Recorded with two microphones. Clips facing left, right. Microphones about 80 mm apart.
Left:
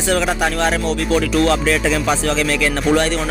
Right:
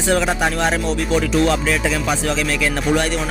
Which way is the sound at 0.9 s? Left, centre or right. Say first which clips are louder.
Left 1 dB; centre.